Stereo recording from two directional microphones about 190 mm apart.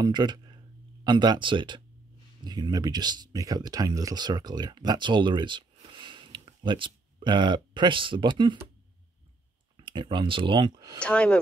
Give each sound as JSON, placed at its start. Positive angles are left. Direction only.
{"t": 0.0, "sound": "speech", "side_deg": -25}
{"t": 9.8, "sound": "speech", "side_deg": -25}
{"t": 11.0, "sound": "speech", "side_deg": 5}